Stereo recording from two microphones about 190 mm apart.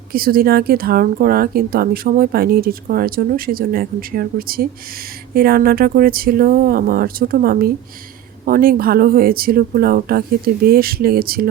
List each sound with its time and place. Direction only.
0.1 s speech: 50° right (ahead or behind)